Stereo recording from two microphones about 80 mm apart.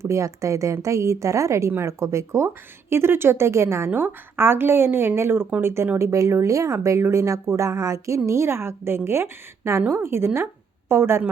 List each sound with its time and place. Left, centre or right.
0.0 s a woman's voice: right
6.0 s a woman's voice: right